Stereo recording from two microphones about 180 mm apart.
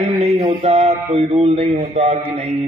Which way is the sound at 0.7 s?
40° right (ahead or behind).